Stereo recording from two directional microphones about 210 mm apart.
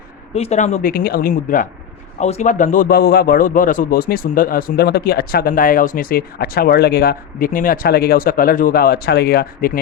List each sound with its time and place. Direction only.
0.3 s a man's voice: 30° left (ahead or behind)